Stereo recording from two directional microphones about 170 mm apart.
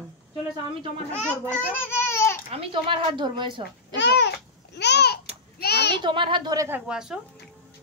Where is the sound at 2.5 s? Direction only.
35° right (ahead or behind).